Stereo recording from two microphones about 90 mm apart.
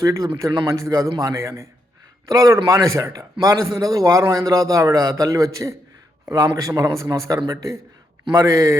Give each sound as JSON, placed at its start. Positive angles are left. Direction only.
{"t": 0.0, "sound": "a man's voice", "side_deg": -40}